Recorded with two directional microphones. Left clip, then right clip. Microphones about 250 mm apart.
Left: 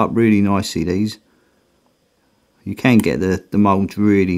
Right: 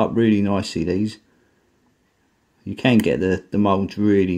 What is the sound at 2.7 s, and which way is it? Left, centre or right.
Speech, left.